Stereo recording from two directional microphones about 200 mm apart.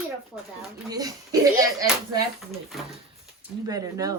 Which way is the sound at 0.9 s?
20° right (ahead or behind).